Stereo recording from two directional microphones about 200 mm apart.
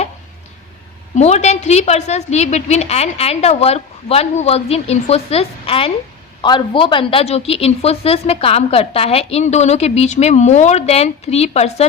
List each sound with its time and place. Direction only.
1.1 s a woman's voice: 35° left (ahead or behind)